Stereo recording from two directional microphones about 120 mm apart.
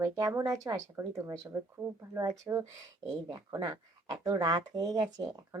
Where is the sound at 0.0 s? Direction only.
30° right (ahead or behind).